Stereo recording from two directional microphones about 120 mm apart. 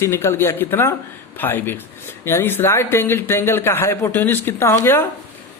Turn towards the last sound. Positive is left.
turn(degrees=20)  # may be behind; listen again after turning